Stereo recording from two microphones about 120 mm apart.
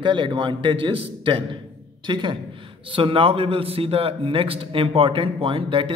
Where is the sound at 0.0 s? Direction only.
40° right (ahead or behind).